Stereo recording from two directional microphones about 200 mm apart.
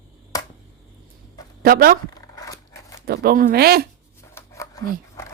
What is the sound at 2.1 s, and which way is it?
Dog, 15° left (ahead or behind).